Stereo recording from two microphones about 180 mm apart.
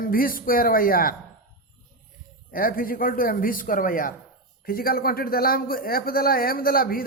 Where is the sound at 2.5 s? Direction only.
50° left (ahead or behind).